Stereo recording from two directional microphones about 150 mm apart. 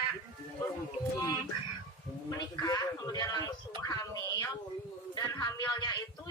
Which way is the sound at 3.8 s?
25° left (ahead or behind).